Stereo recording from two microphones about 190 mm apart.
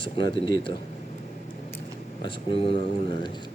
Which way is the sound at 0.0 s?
25° left (ahead or behind).